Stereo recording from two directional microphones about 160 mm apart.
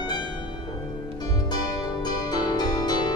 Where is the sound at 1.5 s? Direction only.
25° left (ahead or behind).